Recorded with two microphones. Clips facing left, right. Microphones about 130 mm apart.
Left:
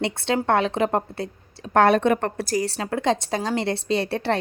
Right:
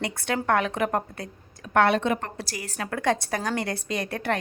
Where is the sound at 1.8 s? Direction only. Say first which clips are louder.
Left 4 dB; 45° left (ahead or behind).